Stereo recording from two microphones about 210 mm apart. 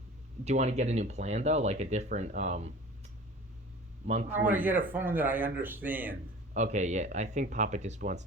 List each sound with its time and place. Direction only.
0.4 s speech: 30° right (ahead or behind)
4.0 s a man's voice: 30° right (ahead or behind)
4.3 s a man's voice: 10° right (ahead or behind)
6.5 s speech: 35° right (ahead or behind)